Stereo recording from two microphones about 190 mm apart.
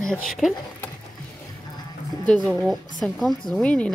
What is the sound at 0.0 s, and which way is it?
Speech, centre (ahead or behind).